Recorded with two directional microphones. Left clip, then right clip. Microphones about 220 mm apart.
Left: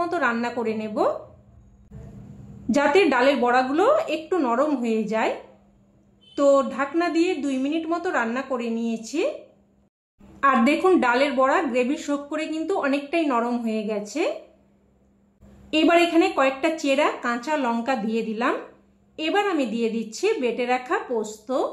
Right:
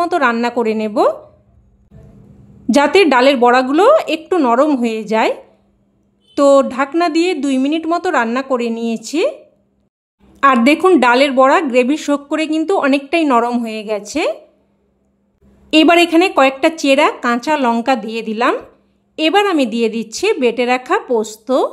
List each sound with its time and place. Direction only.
0.0 s speech: 45° right (ahead or behind)
2.7 s speech: 50° right (ahead or behind)
6.3 s speech: 50° right (ahead or behind)
10.4 s speech: 50° right (ahead or behind)
15.7 s speech: 50° right (ahead or behind)